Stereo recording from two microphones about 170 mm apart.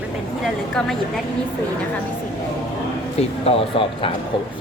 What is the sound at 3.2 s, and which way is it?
Speech, 35° left (ahead or behind).